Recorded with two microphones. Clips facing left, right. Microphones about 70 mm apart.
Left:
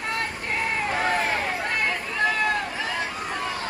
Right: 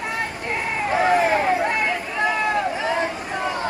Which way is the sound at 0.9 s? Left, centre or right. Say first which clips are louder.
Right 9 dB; centre.